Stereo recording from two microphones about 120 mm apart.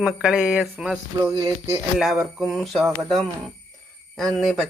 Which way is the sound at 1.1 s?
25° right (ahead or behind).